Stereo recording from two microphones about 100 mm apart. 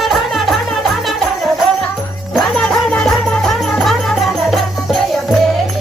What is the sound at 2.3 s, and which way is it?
Music, centre (ahead or behind).